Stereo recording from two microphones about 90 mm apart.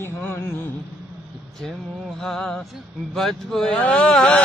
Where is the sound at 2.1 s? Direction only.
5° left (ahead or behind).